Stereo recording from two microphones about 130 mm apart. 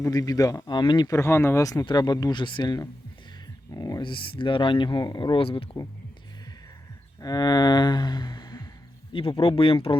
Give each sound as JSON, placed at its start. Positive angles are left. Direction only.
{"t": 0.0, "sound": "speech", "side_deg": 30}
{"t": 7.2, "sound": "a sound", "side_deg": 30}
{"t": 9.1, "sound": "speech", "side_deg": 45}